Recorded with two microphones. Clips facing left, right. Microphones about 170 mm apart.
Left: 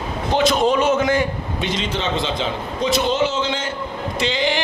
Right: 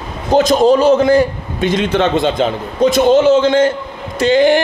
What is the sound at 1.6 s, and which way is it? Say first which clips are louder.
A man's voice: right 10 dB; 55° right (ahead or behind).